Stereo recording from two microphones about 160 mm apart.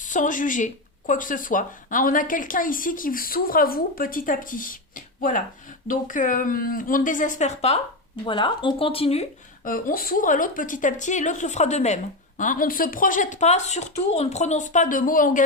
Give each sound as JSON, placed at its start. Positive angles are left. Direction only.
{"t": 0.0, "sound": "speech", "side_deg": 55}
{"t": 8.2, "sound": "speech", "side_deg": 30}
{"t": 9.6, "sound": "speech", "side_deg": 60}
{"t": 12.4, "sound": "speech", "side_deg": 55}